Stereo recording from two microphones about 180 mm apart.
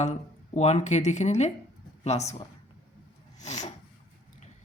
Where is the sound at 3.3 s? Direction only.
40° left (ahead or behind).